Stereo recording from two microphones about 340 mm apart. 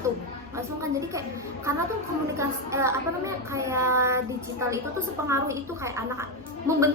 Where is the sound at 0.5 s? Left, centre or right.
Centre.